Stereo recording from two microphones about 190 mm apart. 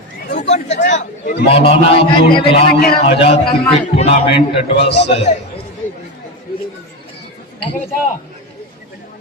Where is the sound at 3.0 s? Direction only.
30° left (ahead or behind).